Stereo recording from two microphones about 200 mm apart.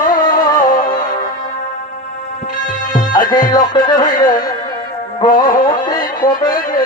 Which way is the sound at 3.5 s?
20° left (ahead or behind).